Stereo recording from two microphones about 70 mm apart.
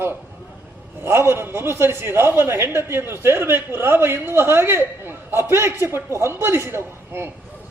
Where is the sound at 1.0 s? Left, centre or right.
Right.